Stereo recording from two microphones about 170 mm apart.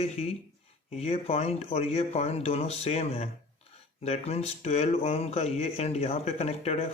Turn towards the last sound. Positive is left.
turn(degrees=35)  # may be behind; listen again after turning